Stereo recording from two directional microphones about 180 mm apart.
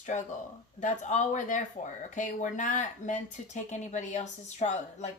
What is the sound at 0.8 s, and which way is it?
A woman's voice, 40° left (ahead or behind).